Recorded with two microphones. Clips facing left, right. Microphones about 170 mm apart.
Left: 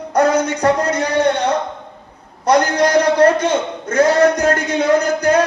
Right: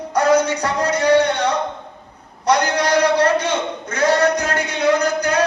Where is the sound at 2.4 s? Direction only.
50° left (ahead or behind).